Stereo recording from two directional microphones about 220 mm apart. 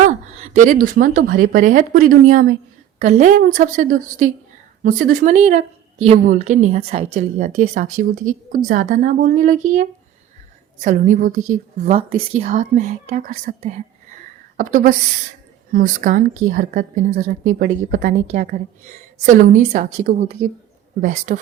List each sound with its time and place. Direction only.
0.1 s a woman's voice: 35° right (ahead or behind)